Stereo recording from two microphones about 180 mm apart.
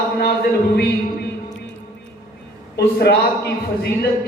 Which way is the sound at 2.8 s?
65° left (ahead or behind).